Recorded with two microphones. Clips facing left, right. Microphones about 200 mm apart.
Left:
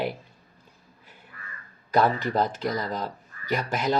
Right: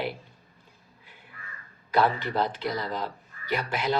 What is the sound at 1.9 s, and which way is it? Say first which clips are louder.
Speech: left 2 dB; 45° left (ahead or behind).